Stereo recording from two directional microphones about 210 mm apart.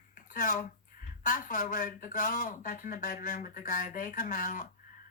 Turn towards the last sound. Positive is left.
turn(degrees=40)  # may be behind; listen again after turning